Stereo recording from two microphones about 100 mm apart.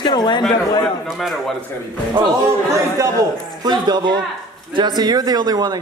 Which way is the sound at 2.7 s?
35° right (ahead or behind).